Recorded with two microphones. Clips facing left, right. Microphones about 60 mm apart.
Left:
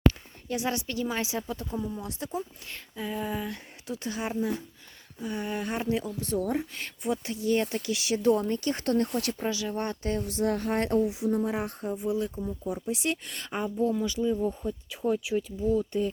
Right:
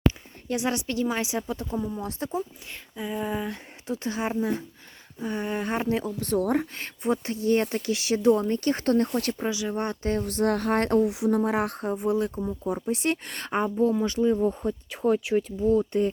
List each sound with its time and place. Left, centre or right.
0.5 s speech: right
2.0 s speech: right
2.9 s a sound: centre
3.8 s speech: right
6.1 s speech: right
6.7 s speech: right
9.4 s speech: centre
10.2 s speech: right